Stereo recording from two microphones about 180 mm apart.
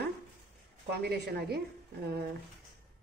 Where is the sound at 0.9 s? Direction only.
65° right (ahead or behind).